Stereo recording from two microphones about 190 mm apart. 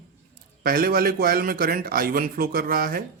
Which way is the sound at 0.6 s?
50° right (ahead or behind).